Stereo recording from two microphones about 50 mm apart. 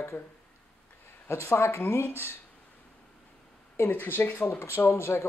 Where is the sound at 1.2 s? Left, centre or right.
Left.